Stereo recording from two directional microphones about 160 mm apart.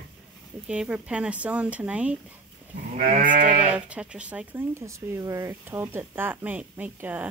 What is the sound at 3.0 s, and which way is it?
Sheep, 55° right (ahead or behind).